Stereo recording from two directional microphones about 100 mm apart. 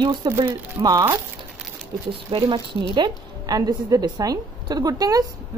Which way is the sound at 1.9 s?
60° right (ahead or behind).